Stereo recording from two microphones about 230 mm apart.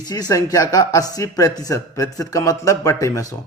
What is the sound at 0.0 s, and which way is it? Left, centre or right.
Speech, centre.